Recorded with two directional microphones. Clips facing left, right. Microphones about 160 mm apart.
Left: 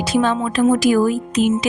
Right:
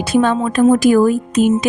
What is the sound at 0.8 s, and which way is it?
Speech, 50° right (ahead or behind).